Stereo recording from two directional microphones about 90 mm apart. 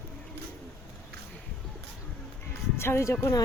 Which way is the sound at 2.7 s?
30° left (ahead or behind).